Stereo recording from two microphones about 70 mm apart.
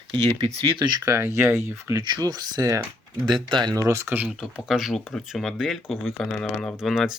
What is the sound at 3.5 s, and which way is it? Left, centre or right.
Speech, right.